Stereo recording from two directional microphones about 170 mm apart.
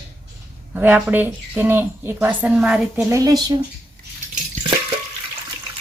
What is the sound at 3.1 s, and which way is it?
Speech, 20° right (ahead or behind).